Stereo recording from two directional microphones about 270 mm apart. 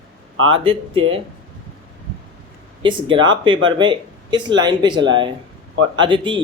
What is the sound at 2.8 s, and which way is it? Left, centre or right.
Speech, centre.